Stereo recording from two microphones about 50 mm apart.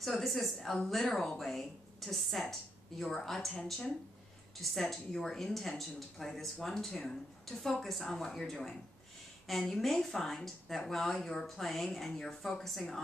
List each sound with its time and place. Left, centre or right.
0.0 s a woman's voice: centre